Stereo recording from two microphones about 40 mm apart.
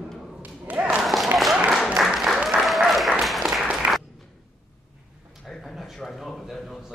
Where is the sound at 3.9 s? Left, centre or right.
Centre.